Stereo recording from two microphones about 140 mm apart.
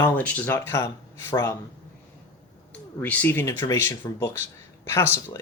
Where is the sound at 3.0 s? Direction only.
10° left (ahead or behind).